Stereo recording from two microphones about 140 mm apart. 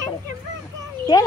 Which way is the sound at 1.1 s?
25° left (ahead or behind).